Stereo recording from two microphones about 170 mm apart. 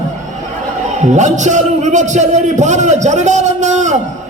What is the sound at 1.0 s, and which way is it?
A man's voice, 45° right (ahead or behind).